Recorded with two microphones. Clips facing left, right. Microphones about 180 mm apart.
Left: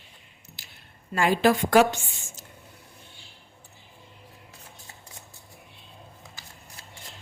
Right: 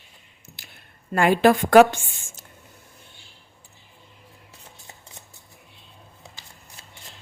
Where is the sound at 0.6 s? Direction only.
55° right (ahead or behind).